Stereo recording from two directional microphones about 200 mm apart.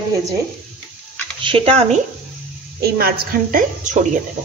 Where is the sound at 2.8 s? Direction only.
50° right (ahead or behind).